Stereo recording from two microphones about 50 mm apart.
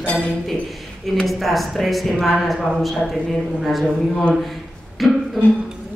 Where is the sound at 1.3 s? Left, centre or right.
Centre.